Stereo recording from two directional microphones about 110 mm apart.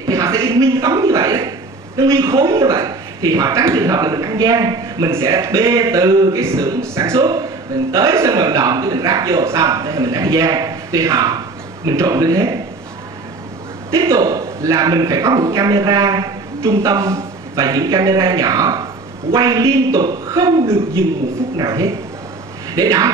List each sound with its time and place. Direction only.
0.0 s a sound: 30° right (ahead or behind)
2.0 s speech: 25° right (ahead or behind)
13.8 s a man's voice: 25° right (ahead or behind)